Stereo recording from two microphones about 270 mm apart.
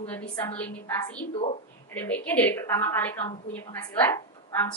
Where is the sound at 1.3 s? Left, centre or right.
Left.